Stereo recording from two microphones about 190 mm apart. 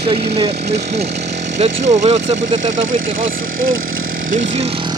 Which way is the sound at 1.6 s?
35° right (ahead or behind).